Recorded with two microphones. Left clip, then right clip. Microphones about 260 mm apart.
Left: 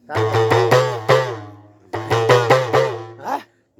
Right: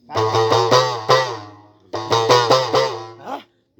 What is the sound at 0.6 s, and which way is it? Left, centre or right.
Music, right.